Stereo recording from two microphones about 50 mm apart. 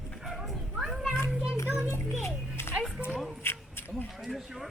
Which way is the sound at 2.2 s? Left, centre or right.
Left.